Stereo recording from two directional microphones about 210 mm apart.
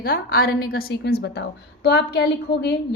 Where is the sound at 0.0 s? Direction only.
45° left (ahead or behind).